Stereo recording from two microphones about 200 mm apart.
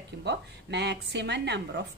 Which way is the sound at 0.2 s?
60° right (ahead or behind).